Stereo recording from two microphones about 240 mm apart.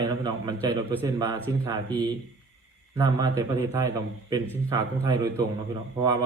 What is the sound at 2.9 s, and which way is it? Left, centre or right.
A man's voice, centre.